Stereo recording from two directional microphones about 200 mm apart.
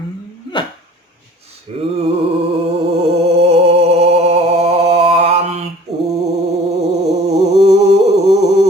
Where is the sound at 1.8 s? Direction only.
30° right (ahead or behind).